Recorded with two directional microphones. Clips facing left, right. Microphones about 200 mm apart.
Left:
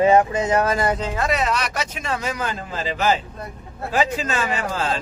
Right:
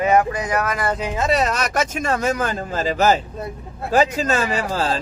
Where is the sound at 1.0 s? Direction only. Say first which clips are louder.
Right 2 dB; 20° right (ahead or behind).